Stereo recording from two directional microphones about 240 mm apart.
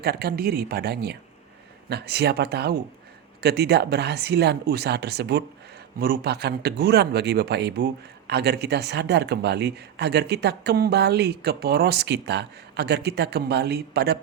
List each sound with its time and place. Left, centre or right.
0.0 s speech: right